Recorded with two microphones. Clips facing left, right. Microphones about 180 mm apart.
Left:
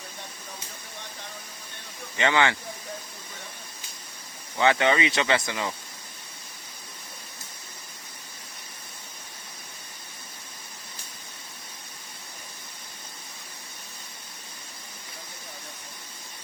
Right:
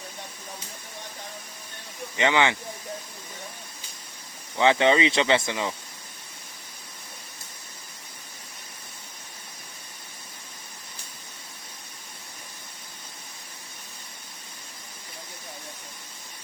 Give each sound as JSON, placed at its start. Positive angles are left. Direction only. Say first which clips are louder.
{"t": 2.1, "sound": "speech", "louder": "right 1 dB", "side_deg": -15}
{"t": 4.6, "sound": "speech", "louder": "right 2 dB", "side_deg": -25}